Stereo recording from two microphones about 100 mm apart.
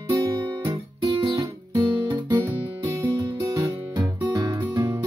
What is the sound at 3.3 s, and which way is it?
Music, 30° right (ahead or behind).